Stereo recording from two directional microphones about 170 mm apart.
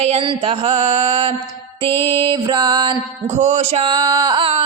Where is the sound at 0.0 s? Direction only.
35° right (ahead or behind).